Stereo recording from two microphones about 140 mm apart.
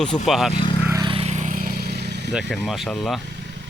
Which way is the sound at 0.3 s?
Centre (ahead or behind).